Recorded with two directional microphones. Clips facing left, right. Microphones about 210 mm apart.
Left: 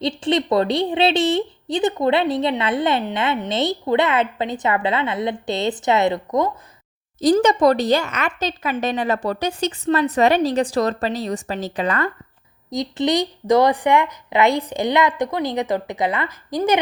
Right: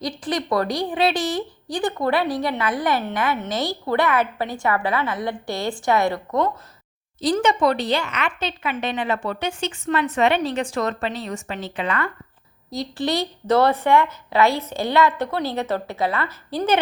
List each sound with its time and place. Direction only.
0.0 s a woman's voice: 25° left (ahead or behind)
7.2 s a woman's voice: 40° left (ahead or behind)
12.7 s a woman's voice: 20° left (ahead or behind)